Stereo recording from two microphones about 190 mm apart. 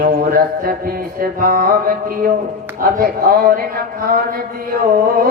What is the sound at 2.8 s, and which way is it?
Music, 50° right (ahead or behind).